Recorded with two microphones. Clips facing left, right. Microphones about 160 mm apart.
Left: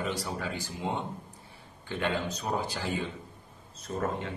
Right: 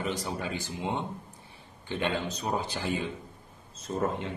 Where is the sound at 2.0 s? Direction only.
20° right (ahead or behind).